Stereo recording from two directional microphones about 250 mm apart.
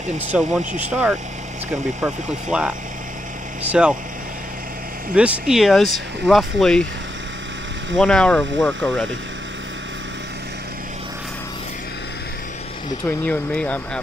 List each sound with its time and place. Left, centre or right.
0.3 s speech: centre
5.1 s speech: centre
8.0 s speech: centre
13.0 s speech: centre